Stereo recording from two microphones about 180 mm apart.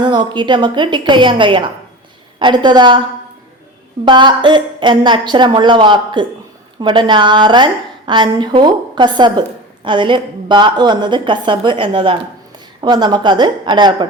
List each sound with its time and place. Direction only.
0.0 s a woman's voice: 25° right (ahead or behind)
4.0 s a woman's voice: 25° right (ahead or behind)